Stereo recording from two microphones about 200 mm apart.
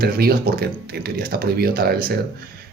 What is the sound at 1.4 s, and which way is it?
Speech, 50° right (ahead or behind).